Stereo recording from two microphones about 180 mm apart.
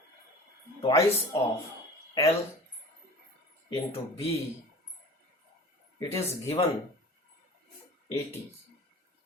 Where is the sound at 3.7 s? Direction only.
35° left (ahead or behind).